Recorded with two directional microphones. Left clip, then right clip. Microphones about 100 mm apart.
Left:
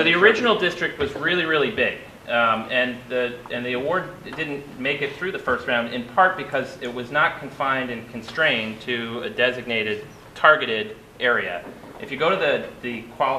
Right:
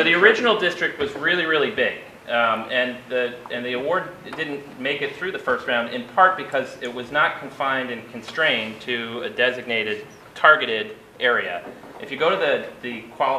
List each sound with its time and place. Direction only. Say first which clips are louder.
0.0 s speech: right 1 dB; 15° left (ahead or behind)